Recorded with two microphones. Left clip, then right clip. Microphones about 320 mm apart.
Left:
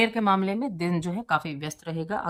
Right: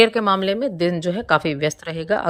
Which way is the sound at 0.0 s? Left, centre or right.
Centre.